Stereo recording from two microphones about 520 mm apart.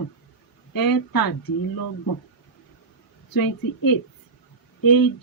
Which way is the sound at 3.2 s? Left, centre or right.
Left.